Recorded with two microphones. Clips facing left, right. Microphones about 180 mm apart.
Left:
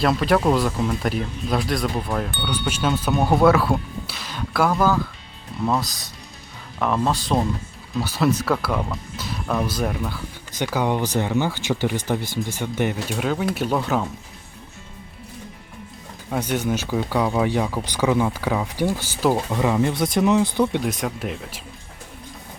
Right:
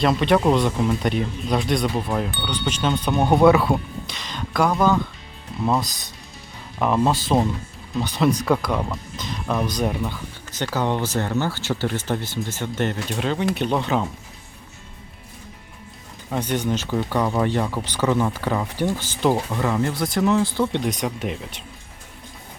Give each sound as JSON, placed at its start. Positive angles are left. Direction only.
{"t": 0.0, "sound": "speech", "side_deg": 0}
{"t": 10.6, "sound": "speech", "side_deg": 10}
{"t": 16.3, "sound": "speech", "side_deg": 10}
{"t": 20.8, "sound": "speech", "side_deg": 0}